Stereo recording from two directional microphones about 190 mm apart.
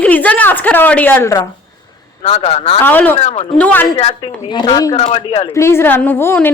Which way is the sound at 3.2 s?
35° left (ahead or behind).